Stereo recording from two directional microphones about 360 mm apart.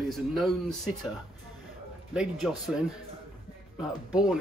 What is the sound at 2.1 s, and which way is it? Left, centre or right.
Speech, centre.